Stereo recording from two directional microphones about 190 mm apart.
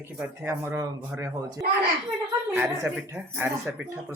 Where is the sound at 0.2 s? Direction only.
10° right (ahead or behind).